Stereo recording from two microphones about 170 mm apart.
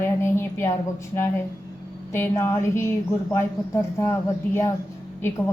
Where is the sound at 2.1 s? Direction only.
15° left (ahead or behind).